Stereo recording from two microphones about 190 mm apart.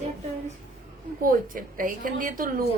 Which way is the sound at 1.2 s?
45° right (ahead or behind).